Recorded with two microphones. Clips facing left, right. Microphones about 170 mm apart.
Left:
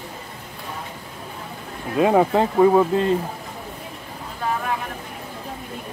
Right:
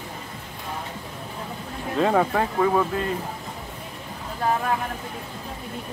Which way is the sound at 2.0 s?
15° left (ahead or behind).